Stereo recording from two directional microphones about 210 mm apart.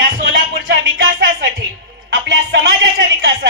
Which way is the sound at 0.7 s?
50° right (ahead or behind).